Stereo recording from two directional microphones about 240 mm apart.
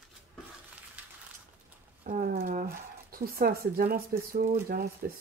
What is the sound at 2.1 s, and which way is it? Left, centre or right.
Speech, right.